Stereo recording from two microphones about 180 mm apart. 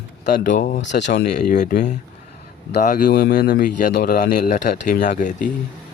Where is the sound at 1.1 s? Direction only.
60° left (ahead or behind).